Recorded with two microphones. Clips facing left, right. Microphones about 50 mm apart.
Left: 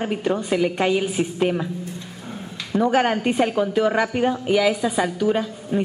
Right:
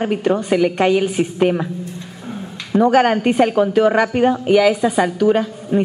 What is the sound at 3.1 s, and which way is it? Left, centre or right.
A woman's voice, centre.